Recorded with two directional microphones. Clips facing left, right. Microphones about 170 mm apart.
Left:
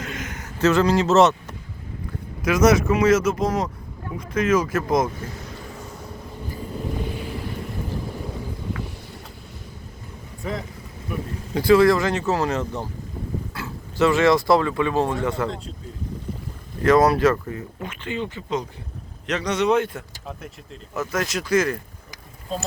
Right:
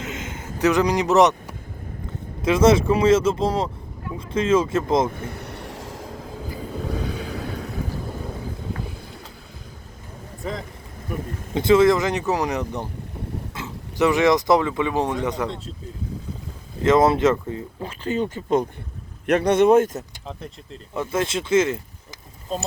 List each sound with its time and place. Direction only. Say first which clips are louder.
0.0 s a sound: right 1 dB; 25° right (ahead or behind)
0.6 s speech: left 1 dB; 15° right (ahead or behind)
2.4 s speech: right 1 dB; 25° right (ahead or behind)
5.1 s vehicle: right 2 dB; 60° right (ahead or behind); by 6.1 s 90° right
11.5 s speech: even; 20° right (ahead or behind)
15.4 s speech: left 1 dB; centre (ahead or behind)
16.8 s speech: even; 25° right (ahead or behind); by 20.1 s 45° right (ahead or behind)
20.9 s speech: right 2 dB; 30° right (ahead or behind)